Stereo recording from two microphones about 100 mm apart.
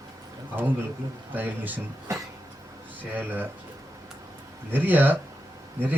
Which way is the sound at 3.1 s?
20° right (ahead or behind).